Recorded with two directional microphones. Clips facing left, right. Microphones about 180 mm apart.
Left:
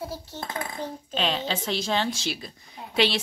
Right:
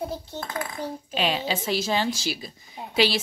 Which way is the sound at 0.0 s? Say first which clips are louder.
Right 3 dB; 20° right (ahead or behind).